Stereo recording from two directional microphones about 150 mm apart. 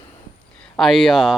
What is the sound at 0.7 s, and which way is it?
Speech, centre (ahead or behind).